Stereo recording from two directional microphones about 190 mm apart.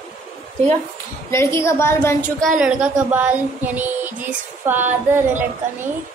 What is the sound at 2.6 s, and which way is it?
Female singing, 10° right (ahead or behind).